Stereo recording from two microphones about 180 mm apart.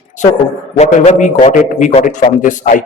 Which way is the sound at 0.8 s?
40° left (ahead or behind).